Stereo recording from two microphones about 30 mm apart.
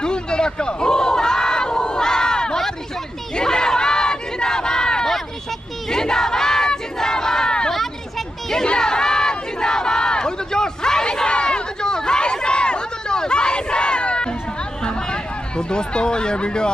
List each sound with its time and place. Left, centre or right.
0.0 s crowd: left
5.9 s battle cry: left
8.6 s crowd: left
14.8 s a sound: left